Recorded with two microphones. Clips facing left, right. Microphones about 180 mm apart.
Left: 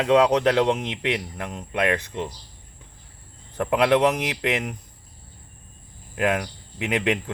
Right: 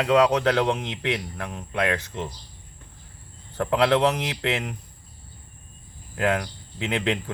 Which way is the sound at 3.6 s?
15° left (ahead or behind).